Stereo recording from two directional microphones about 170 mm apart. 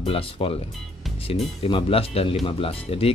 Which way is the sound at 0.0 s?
35° left (ahead or behind).